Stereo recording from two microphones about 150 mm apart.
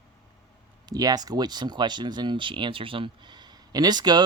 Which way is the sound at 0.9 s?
25° right (ahead or behind).